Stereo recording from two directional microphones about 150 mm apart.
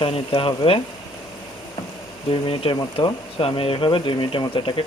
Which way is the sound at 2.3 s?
35° left (ahead or behind).